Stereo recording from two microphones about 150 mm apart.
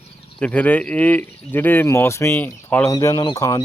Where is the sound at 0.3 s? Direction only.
10° left (ahead or behind).